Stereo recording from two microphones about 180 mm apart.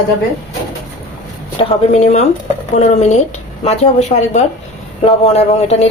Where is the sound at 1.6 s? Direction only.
40° left (ahead or behind).